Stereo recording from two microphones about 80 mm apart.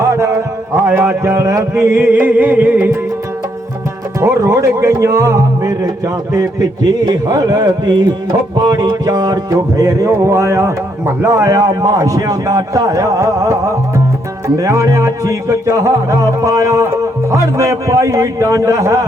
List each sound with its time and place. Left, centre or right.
0.0 s a sound: right
0.9 s speech: right
1.7 s music: right
4.2 s speech: right
6.3 s music: right
14.4 s speech: right